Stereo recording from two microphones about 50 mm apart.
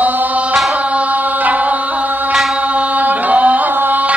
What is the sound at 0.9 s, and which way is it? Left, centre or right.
Music, right.